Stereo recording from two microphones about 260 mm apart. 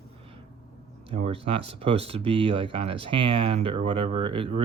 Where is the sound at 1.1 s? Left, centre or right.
Right.